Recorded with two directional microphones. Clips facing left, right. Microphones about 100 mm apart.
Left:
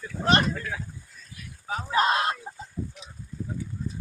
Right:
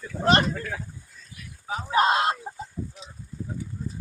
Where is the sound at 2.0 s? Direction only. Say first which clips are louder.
Right 3 dB; 30° right (ahead or behind).